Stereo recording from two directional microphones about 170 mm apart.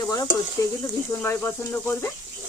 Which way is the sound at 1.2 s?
10° left (ahead or behind).